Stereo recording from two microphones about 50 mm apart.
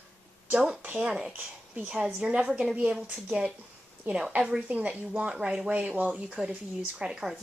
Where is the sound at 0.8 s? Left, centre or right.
Right.